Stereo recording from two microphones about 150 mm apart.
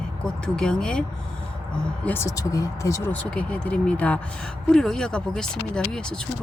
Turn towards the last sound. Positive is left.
turn(degrees=5)  # may be behind; listen again after turning